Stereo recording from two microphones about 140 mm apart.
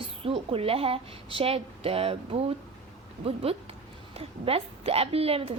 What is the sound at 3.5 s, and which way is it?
A woman's voice, 45° right (ahead or behind).